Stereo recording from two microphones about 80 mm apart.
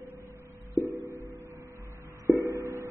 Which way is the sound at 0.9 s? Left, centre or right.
Right.